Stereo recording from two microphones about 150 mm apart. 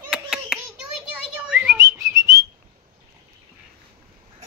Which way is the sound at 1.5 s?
10° right (ahead or behind).